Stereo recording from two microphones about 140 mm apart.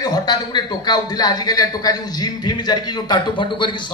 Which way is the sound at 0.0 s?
30° left (ahead or behind).